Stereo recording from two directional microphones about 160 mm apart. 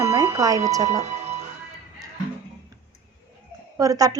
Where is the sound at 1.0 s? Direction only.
45° right (ahead or behind).